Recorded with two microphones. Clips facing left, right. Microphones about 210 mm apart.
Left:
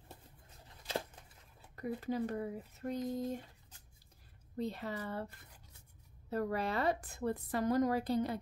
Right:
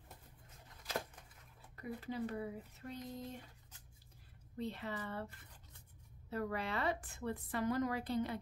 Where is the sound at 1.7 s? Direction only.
45° left (ahead or behind).